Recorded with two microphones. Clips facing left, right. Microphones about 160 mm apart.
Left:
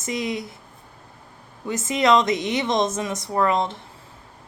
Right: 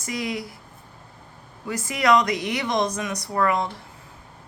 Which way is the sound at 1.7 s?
20° left (ahead or behind).